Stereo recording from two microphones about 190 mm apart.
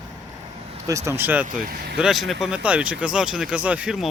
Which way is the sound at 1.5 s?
50° right (ahead or behind).